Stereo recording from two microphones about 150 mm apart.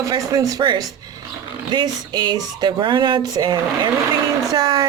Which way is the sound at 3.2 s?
25° right (ahead or behind).